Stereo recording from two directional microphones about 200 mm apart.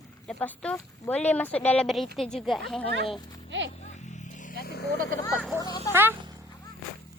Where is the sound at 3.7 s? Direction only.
35° left (ahead or behind).